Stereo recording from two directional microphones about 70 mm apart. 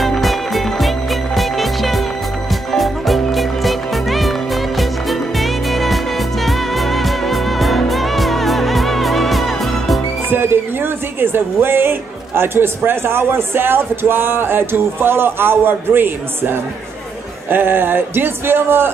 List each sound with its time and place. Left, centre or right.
0.0 s music: centre
10.3 s speech: right